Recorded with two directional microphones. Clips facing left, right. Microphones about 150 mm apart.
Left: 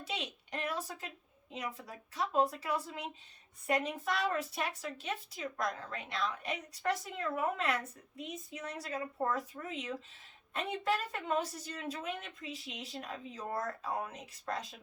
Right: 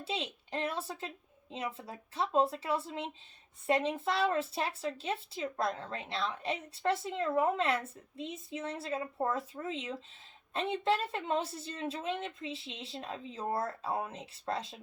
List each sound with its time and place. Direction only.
0.0 s a woman's voice: 30° right (ahead or behind)